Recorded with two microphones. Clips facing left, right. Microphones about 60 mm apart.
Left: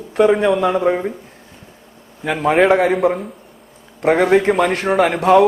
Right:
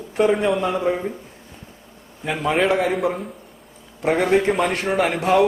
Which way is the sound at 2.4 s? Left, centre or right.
Left.